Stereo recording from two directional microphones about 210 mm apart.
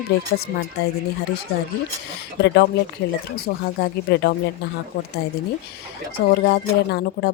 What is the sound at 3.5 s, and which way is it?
Speech, 55° left (ahead or behind).